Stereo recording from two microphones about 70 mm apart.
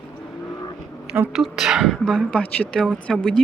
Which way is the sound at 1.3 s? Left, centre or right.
Centre.